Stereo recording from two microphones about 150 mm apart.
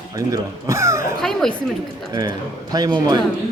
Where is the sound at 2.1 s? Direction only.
30° right (ahead or behind).